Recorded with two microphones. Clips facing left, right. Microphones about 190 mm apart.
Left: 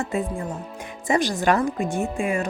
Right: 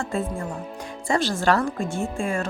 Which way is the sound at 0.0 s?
15° left (ahead or behind).